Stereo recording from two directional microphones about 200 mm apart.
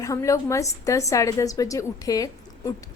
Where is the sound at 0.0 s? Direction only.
15° left (ahead or behind).